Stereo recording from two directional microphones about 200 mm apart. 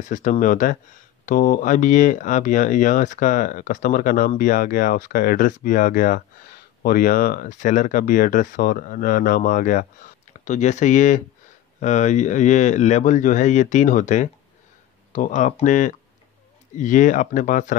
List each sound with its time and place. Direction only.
0.0 s speech: 40° left (ahead or behind)